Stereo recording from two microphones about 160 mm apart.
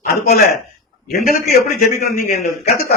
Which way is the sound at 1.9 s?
65° left (ahead or behind).